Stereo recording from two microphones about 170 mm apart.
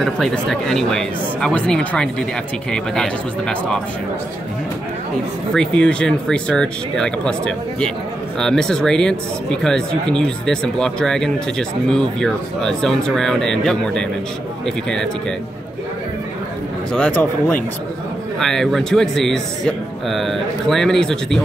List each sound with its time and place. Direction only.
0.0 s speech: centre (ahead or behind)
5.5 s speech: 5° left (ahead or behind)
16.9 s speech: 10° left (ahead or behind)